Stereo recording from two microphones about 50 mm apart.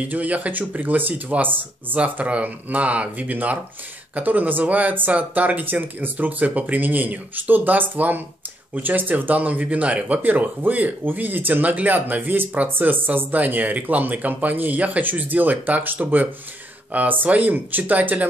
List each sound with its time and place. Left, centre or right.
0.1 s speech: right